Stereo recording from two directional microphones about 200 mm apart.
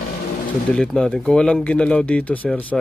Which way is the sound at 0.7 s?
5° left (ahead or behind).